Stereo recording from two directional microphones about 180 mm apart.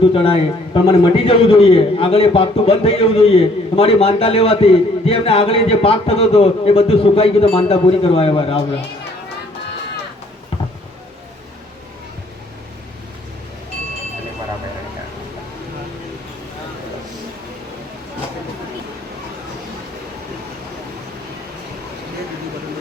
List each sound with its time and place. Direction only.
0.1 s a man's voice: 30° left (ahead or behind)